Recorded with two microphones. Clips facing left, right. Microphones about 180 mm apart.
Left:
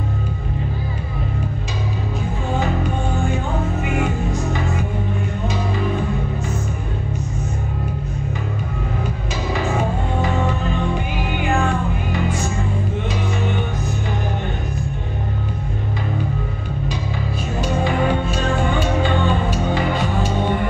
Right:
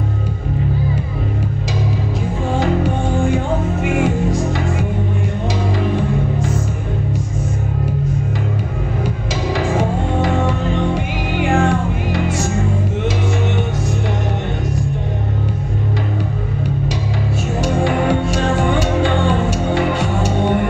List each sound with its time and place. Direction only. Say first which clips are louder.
2.6 s music: right 6 dB; 90° right
9.6 s music: right 3 dB; 85° right
11.5 s music: right 4 dB; 85° right
17.6 s music: right 3 dB; 75° right (ahead or behind)